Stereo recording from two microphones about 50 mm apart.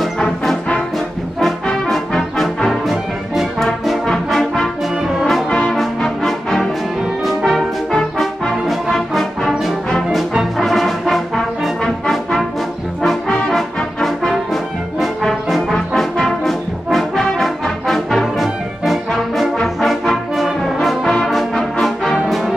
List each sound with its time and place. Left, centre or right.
1.9 s brass instrument: centre
3.5 s music: centre
4.1 s brass instrument: centre
5.7 s brass instrument: centre
8.6 s music: centre
10.6 s brass instrument: centre
13.5 s brass instrument: centre